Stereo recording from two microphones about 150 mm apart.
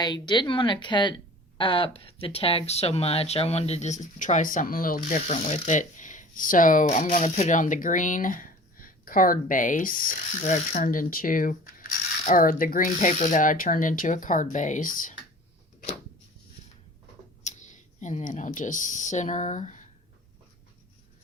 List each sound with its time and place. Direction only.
0.0 s a woman's voice: 30° left (ahead or behind); by 15.1 s 65° left (ahead or behind)
17.5 s a sound: 50° left (ahead or behind)
18.0 s speech: 55° left (ahead or behind)